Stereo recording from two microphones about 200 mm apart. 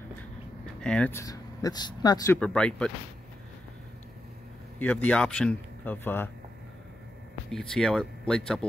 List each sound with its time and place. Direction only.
0.7 s speech: 5° left (ahead or behind)
2.3 s speech: 5° left (ahead or behind)
4.7 s speech: 5° left (ahead or behind)
7.5 s speech: centre (ahead or behind)